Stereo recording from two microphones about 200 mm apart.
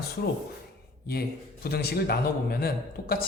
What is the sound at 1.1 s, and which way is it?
A man's voice, 50° left (ahead or behind).